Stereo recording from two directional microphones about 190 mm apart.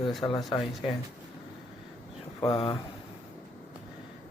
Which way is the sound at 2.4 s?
25° left (ahead or behind).